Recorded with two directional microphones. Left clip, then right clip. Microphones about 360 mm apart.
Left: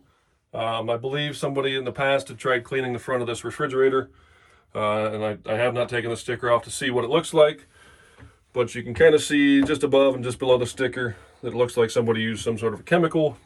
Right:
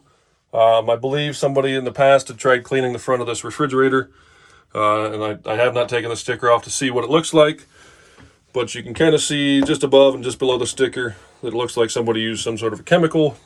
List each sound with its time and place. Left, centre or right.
0.6 s speech: centre
8.5 s speech: centre